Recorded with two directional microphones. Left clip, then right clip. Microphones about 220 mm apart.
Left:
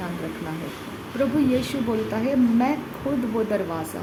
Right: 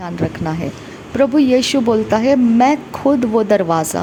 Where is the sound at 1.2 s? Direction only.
40° right (ahead or behind).